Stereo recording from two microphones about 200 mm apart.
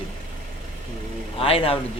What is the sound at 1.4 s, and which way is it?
Speech, 30° left (ahead or behind).